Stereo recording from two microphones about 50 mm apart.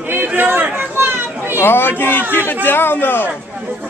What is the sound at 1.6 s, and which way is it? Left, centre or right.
A man's voice, left.